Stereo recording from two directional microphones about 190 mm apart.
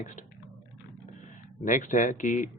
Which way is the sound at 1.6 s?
40° left (ahead or behind).